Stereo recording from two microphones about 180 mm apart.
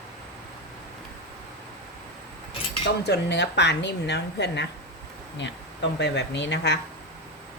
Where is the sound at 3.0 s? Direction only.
75° left (ahead or behind).